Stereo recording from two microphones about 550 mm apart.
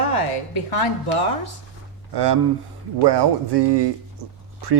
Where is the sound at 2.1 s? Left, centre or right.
Right.